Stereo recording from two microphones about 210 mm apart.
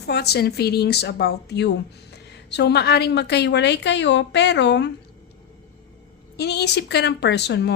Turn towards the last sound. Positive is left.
turn(degrees=55)  # may be behind; listen again after turning